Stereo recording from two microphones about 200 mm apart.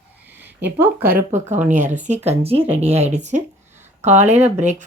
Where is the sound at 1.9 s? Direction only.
35° right (ahead or behind).